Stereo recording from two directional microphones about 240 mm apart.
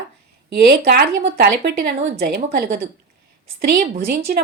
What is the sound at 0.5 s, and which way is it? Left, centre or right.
Speech, right.